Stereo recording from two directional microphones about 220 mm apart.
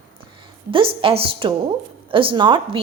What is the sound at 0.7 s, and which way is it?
A woman's voice, 25° right (ahead or behind).